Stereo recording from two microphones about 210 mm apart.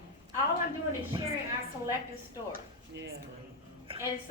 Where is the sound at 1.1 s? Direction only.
20° right (ahead or behind).